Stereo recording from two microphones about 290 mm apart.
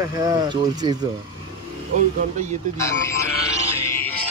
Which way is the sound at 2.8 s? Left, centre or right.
Centre.